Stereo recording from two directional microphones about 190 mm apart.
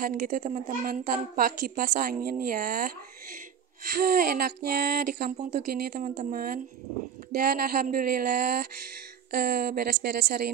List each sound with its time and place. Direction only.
0.0 s a woman's voice: 45° right (ahead or behind)
4.0 s a woman's voice: 50° right (ahead or behind)